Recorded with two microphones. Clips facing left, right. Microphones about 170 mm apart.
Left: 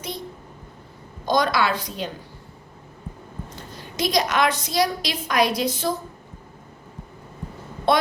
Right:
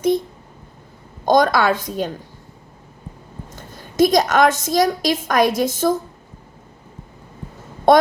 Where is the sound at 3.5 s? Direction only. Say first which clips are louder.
Right 2 dB; 50° right (ahead or behind).